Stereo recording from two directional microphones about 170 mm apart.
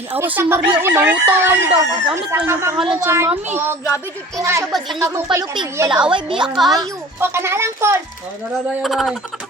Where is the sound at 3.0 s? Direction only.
15° right (ahead or behind).